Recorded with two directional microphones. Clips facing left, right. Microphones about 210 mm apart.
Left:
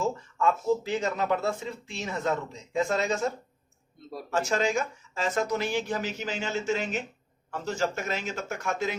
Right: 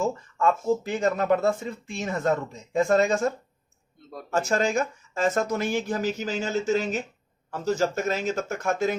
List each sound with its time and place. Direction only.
0.3 s speech: 50° right (ahead or behind)